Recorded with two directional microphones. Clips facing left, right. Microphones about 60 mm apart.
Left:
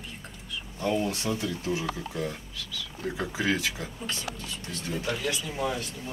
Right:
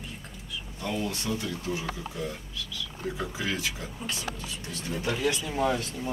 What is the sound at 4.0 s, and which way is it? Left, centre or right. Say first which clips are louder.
Speech: right 2 dB; centre.